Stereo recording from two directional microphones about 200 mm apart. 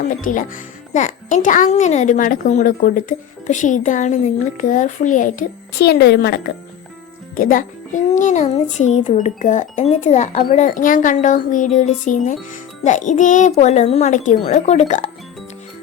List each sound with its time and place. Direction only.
0.1 s a child's voice: 40° left (ahead or behind)
7.3 s a child's voice: 45° left (ahead or behind)